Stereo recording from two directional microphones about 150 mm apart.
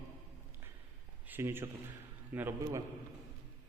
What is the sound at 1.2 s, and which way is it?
A man's voice, 15° right (ahead or behind).